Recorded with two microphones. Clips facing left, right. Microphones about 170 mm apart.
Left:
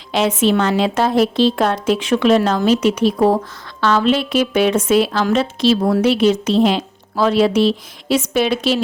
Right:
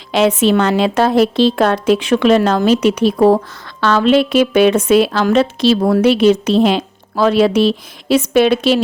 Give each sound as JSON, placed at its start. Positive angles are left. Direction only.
{"t": 0.1, "sound": "a woman's voice", "side_deg": -65}